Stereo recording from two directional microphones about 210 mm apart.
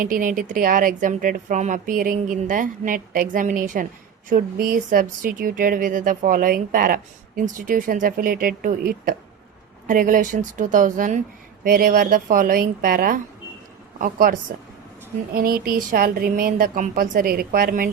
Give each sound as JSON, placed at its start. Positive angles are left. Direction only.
{"t": 0.0, "sound": "speech", "side_deg": -40}